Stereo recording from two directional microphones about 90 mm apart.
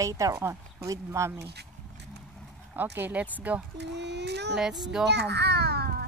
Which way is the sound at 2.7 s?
20° right (ahead or behind).